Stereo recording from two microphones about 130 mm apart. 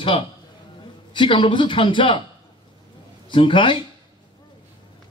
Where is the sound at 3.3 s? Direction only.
40° left (ahead or behind).